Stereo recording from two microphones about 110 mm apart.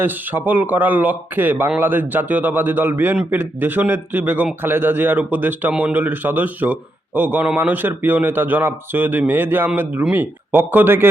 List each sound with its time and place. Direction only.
0.0 s speech: 15° right (ahead or behind)